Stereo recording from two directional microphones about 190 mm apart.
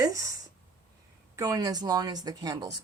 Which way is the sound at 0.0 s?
20° right (ahead or behind).